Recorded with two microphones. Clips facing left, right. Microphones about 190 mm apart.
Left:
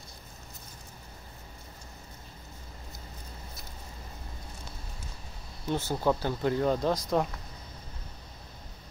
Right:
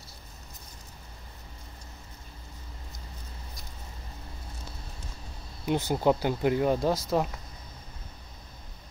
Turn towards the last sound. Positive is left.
turn(degrees=-5)  # may be behind; listen again after turning